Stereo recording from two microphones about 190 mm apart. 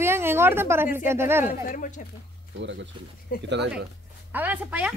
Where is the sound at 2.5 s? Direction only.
70° right (ahead or behind).